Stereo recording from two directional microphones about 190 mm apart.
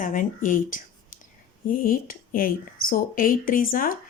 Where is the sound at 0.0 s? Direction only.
45° left (ahead or behind).